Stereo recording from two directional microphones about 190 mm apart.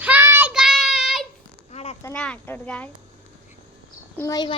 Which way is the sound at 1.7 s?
35° left (ahead or behind).